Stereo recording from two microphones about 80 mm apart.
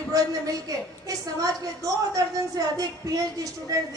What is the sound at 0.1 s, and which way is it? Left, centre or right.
A woman's voice, right.